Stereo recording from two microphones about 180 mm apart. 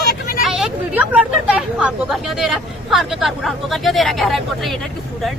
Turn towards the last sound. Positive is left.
turn(degrees=0)  # may be behind; listen again after turning